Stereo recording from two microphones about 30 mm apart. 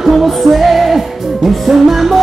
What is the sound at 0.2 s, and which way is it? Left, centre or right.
Music, centre.